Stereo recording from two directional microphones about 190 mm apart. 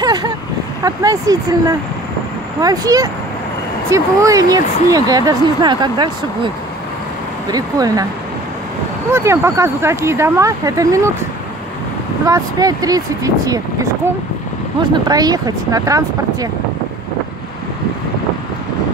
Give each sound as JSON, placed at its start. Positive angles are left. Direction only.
{"t": 0.0, "sound": "a sound", "side_deg": -20}
{"t": 0.8, "sound": "speech", "side_deg": -20}
{"t": 7.5, "sound": "speech", "side_deg": -20}
{"t": 9.1, "sound": "speech", "side_deg": -15}
{"t": 12.3, "sound": "speech", "side_deg": -20}
{"t": 15.0, "sound": "speech", "side_deg": -20}